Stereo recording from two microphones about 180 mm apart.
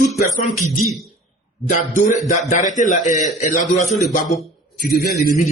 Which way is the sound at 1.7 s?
45° left (ahead or behind).